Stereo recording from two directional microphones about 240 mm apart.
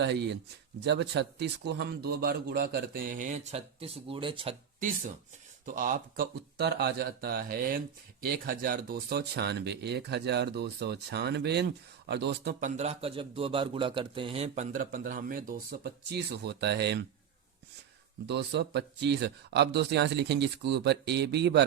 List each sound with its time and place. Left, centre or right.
0.0 s a man's voice: right
5.6 s a man's voice: right
18.3 s speech: right